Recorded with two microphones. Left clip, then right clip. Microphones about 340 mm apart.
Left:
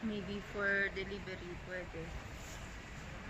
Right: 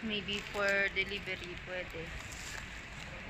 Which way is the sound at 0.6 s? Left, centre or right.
Centre.